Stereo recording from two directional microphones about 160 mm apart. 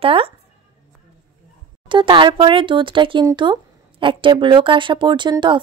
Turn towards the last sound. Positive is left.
turn(degrees=-30)  # may be behind; listen again after turning